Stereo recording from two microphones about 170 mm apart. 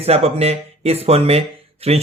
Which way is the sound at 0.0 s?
35° right (ahead or behind).